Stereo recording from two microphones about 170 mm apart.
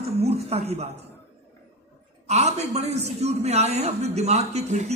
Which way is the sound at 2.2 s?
40° right (ahead or behind).